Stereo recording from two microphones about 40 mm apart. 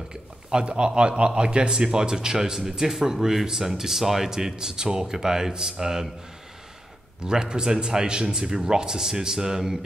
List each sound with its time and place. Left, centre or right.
0.1 s speech: right
7.2 s speech: centre